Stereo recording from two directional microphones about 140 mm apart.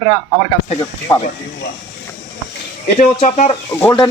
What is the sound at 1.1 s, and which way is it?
Speech, 20° left (ahead or behind).